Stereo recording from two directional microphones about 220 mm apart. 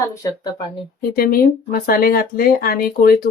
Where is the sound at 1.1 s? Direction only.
40° left (ahead or behind).